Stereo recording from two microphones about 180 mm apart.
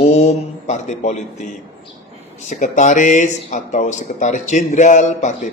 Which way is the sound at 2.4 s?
45° left (ahead or behind).